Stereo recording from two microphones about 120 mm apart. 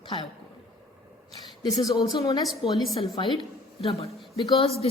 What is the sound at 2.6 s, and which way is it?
Speech, 45° left (ahead or behind).